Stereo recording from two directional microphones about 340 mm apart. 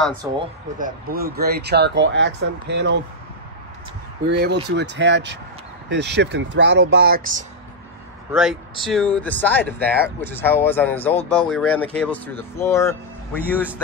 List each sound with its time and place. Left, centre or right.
0.2 s speech: centre
4.3 s speech: right
8.3 s speech: centre